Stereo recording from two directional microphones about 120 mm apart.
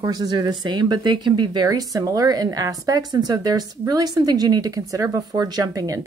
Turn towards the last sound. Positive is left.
turn(degrees=-30)  # may be behind; listen again after turning